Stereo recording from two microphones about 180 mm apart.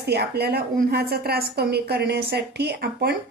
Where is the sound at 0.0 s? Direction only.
65° right (ahead or behind).